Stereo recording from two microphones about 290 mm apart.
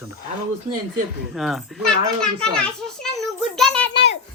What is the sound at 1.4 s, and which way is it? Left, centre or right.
A man's voice, centre.